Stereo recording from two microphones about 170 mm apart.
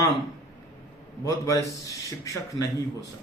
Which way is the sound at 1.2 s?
20° left (ahead or behind).